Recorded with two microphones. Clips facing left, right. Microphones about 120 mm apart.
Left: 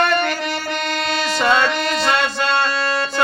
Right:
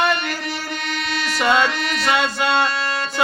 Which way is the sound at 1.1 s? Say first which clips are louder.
Left 3 dB; 90° left.